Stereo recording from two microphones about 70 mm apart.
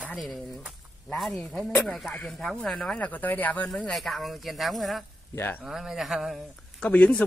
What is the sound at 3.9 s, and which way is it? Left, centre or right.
Speech, centre.